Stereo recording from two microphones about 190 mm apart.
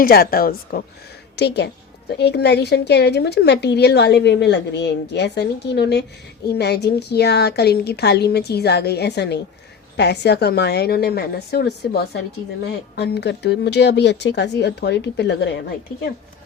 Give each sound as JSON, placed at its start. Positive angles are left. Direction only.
{"t": 0.0, "sound": "a woman's voice", "side_deg": 55}
{"t": 1.4, "sound": "a woman's voice", "side_deg": 65}